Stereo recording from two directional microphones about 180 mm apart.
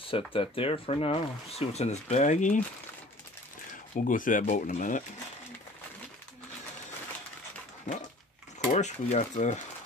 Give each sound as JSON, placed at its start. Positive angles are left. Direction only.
{"t": 0.0, "sound": "speech", "side_deg": 30}
{"t": 3.9, "sound": "speech", "side_deg": 50}
{"t": 8.7, "sound": "speech", "side_deg": 40}